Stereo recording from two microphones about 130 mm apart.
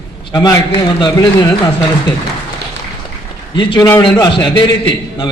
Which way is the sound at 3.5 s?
35° left (ahead or behind).